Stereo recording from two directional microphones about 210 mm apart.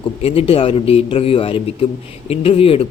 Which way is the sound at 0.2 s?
30° left (ahead or behind).